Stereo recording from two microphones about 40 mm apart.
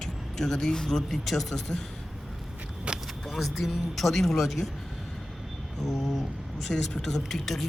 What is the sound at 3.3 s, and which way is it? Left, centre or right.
Speech, centre.